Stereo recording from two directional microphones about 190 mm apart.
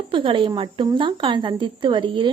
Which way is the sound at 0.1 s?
25° right (ahead or behind).